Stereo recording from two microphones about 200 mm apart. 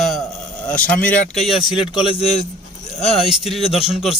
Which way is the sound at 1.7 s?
25° left (ahead or behind).